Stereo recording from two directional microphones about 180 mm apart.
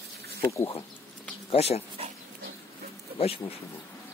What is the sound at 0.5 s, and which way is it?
Speech, 15° left (ahead or behind).